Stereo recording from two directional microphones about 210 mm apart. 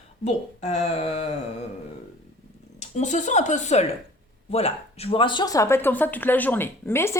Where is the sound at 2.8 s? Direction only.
35° left (ahead or behind); by 7.1 s 10° left (ahead or behind).